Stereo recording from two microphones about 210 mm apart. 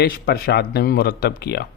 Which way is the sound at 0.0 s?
45° left (ahead or behind).